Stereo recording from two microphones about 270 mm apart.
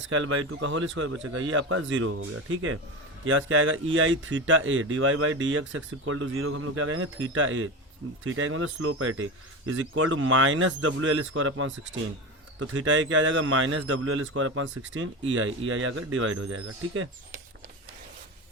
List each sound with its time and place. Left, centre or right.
0.1 s speech: right